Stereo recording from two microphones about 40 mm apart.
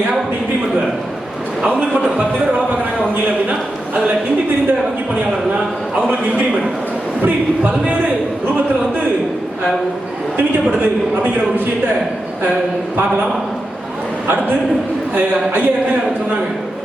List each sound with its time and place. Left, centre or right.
6.1 s a man's voice: right
15.1 s a man's voice: right